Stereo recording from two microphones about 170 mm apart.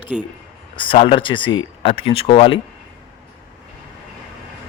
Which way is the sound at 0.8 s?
30° left (ahead or behind).